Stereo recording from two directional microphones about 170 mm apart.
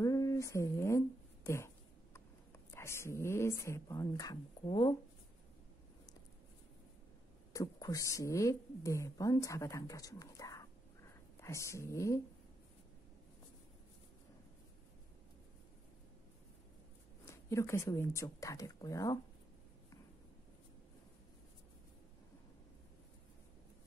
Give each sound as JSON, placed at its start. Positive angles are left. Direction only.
{"t": 0.0, "sound": "a sound", "side_deg": 20}
{"t": 2.7, "sound": "a woman's voice", "side_deg": 15}
{"t": 7.5, "sound": "a woman's voice", "side_deg": 20}
{"t": 17.3, "sound": "a woman's voice", "side_deg": 15}